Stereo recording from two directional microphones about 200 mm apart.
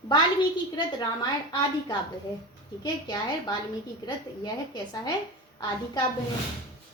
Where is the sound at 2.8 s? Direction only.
20° left (ahead or behind).